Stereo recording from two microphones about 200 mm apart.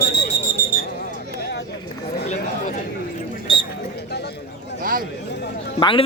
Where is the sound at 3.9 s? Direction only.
55° left (ahead or behind).